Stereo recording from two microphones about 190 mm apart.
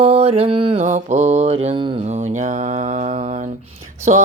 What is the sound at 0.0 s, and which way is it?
Speech, 30° right (ahead or behind).